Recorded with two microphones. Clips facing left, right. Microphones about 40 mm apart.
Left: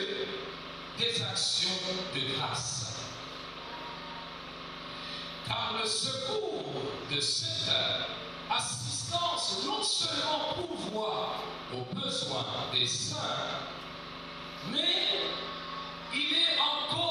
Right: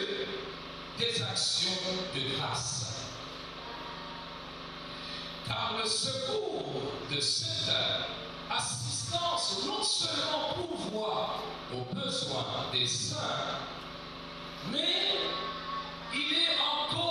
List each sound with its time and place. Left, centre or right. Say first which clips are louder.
0.9 s speech: even; left
5.5 s speech: even; left
14.7 s speech: left 1 dB; left
15.1 s music: right 1 dB; right
16.1 s speech: left 1 dB; left
16.6 s basketball bounce: left 1 dB; left